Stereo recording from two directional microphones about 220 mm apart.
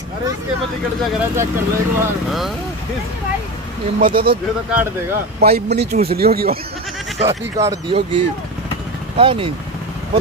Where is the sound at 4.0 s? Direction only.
40° right (ahead or behind).